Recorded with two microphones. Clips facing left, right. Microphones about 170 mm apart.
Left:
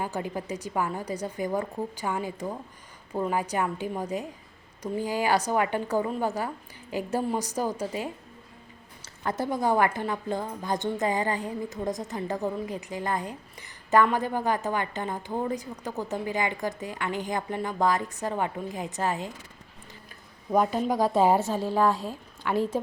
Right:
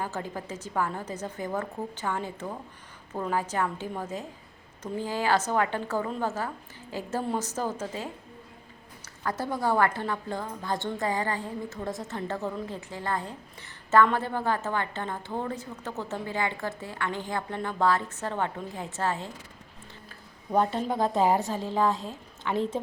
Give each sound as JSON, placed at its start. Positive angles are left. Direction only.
{"t": 0.0, "sound": "a woman's voice", "side_deg": 15}
{"t": 9.4, "sound": "a woman's voice", "side_deg": 20}
{"t": 20.9, "sound": "a woman's voice", "side_deg": -20}
{"t": 21.5, "sound": "a woman's voice", "side_deg": 10}